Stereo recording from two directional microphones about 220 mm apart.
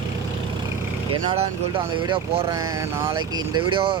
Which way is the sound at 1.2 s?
25° right (ahead or behind).